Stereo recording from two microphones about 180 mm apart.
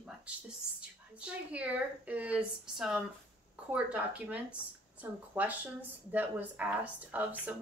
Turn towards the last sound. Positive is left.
turn(degrees=-10)  # may be behind; listen again after turning